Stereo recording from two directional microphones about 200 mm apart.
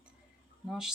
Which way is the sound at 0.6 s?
Centre (ahead or behind).